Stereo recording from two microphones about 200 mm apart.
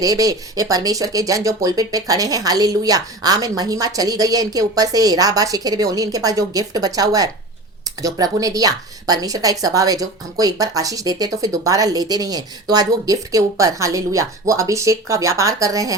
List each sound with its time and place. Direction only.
0.0 s speech: 15° right (ahead or behind)